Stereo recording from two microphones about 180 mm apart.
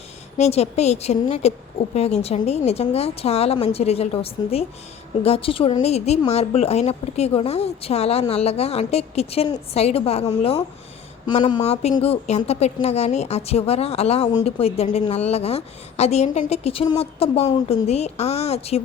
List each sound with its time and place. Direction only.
0.3 s a woman's voice: 35° left (ahead or behind)